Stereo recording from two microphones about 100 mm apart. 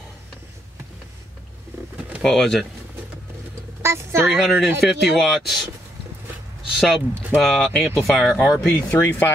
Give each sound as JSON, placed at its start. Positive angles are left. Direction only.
{"t": 2.2, "sound": "speech", "side_deg": 5}
{"t": 3.8, "sound": "a woman's voice", "side_deg": -25}
{"t": 4.4, "sound": "speech", "side_deg": -5}
{"t": 6.7, "sound": "speech", "side_deg": -5}